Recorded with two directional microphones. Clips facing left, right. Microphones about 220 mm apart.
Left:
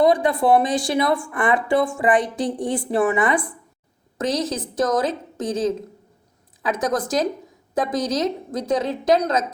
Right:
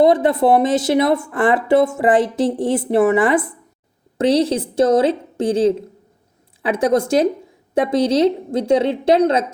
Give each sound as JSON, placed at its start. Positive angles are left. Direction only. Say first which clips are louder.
{"t": 0.0, "sound": "speech", "louder": "right 4 dB", "side_deg": -25}